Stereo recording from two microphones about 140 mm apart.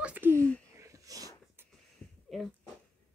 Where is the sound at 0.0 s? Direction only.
10° right (ahead or behind).